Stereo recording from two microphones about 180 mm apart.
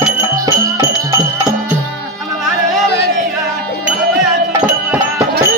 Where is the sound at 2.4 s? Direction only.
Centre (ahead or behind).